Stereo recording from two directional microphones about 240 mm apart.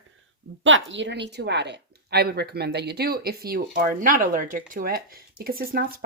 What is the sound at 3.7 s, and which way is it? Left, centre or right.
Speech, right.